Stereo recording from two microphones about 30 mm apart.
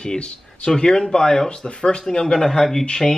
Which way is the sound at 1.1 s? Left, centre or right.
Centre.